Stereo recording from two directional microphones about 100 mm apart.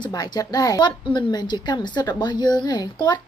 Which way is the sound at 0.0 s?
45° left (ahead or behind).